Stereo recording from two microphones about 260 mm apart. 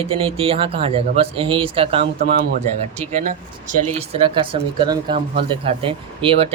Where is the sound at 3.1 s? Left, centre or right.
Right.